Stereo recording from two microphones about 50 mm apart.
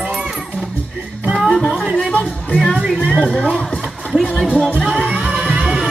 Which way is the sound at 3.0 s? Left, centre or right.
Centre.